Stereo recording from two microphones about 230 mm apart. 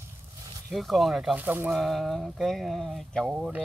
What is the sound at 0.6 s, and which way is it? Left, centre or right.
Speech, centre.